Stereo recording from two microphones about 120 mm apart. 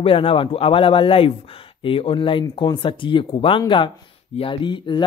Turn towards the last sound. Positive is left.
turn(degrees=40)  # may be behind; listen again after turning